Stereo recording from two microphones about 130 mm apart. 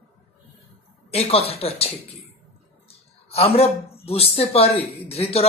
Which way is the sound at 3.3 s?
50° left (ahead or behind).